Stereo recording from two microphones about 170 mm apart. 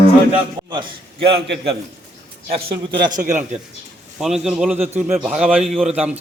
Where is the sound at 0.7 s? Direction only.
30° right (ahead or behind).